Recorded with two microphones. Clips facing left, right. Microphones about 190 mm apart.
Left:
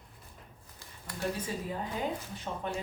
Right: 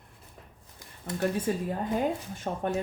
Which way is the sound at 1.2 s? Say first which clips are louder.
Right 6 dB; 50° right (ahead or behind).